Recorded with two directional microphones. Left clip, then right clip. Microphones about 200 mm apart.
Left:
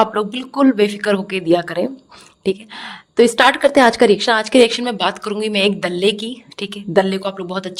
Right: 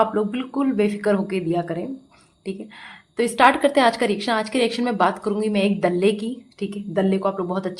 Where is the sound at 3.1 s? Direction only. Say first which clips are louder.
Left 4 dB; 35° left (ahead or behind).